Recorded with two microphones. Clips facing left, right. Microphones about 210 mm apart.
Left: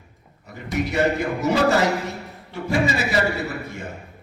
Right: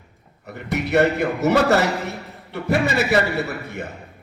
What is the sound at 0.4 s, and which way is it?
A man's voice, 65° right (ahead or behind).